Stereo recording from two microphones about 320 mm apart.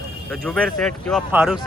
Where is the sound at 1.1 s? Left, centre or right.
Centre.